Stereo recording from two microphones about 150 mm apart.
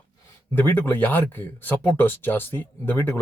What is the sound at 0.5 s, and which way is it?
Speech, 15° left (ahead or behind).